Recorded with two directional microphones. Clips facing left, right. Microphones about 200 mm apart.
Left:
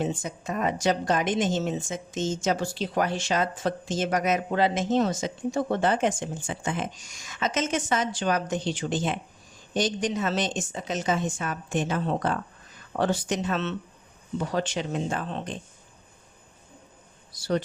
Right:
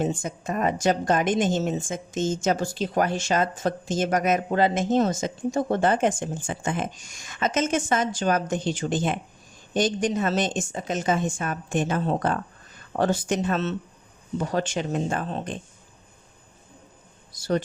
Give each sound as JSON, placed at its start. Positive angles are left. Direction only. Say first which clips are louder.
{"t": 0.0, "sound": "a woman's voice", "louder": "right 3 dB", "side_deg": -50}
{"t": 17.3, "sound": "speech", "louder": "right 2 dB", "side_deg": -45}